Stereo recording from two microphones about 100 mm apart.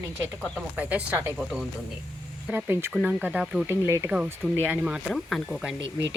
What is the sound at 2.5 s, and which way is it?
Speech, 25° right (ahead or behind).